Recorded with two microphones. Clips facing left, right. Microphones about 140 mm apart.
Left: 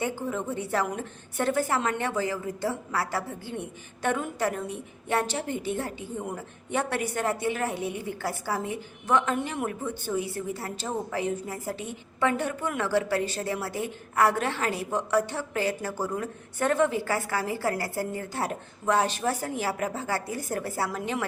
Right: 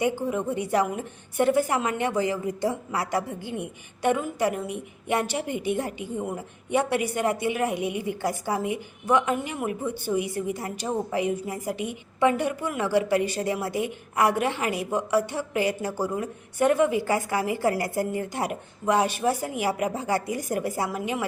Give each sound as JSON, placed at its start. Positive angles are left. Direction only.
{"t": 0.0, "sound": "a woman's voice", "side_deg": -15}